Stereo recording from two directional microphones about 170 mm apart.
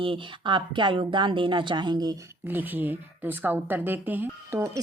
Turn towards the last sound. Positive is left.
turn(degrees=-15)  # may be behind; listen again after turning